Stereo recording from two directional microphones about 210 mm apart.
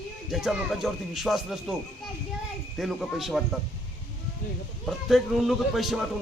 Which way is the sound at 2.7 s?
Centre (ahead or behind).